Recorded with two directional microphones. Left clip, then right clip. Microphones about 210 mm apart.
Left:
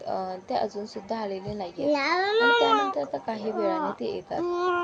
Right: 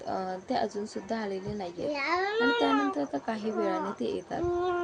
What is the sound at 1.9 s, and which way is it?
A child's voice, 40° left (ahead or behind).